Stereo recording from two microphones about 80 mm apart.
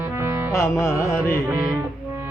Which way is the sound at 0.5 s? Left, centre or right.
Left.